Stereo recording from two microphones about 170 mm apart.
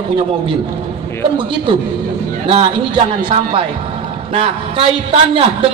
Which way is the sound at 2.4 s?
30° right (ahead or behind).